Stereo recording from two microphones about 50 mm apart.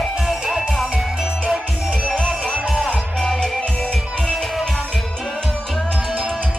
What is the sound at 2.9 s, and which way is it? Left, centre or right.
Music, centre.